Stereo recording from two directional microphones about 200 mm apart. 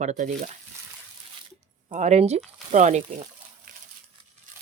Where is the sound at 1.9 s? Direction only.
35° right (ahead or behind).